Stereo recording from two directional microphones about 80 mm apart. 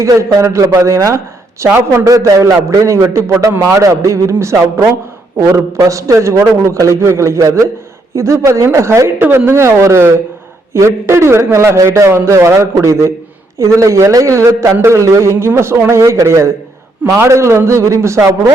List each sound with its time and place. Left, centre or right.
0.0 s a man's voice: right
1.7 s a man's voice: right
2.0 s a man's voice: right